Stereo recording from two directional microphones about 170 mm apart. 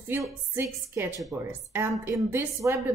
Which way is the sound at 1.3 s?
15° right (ahead or behind).